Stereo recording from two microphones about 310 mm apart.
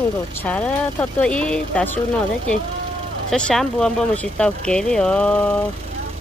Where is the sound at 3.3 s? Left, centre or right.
Centre.